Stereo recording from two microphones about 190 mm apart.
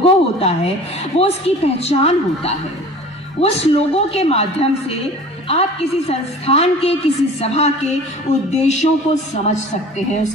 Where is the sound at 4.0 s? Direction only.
30° left (ahead or behind).